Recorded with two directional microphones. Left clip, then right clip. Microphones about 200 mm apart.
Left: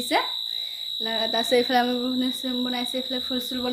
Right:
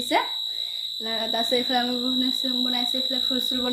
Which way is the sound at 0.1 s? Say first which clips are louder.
Even; 15° left (ahead or behind).